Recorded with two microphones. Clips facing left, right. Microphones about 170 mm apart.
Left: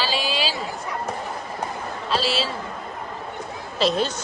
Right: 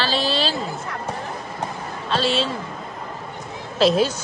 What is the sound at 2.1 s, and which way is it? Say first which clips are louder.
Speech: right 3 dB; 5° left (ahead or behind).